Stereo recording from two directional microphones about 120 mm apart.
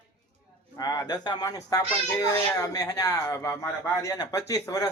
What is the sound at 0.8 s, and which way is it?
Speech, 35° left (ahead or behind).